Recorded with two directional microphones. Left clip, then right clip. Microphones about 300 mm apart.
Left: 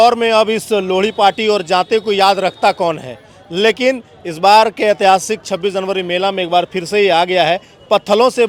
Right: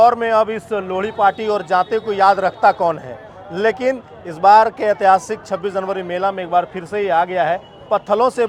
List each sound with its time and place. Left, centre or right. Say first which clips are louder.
0.0 s a man's voice: left 2 dB; left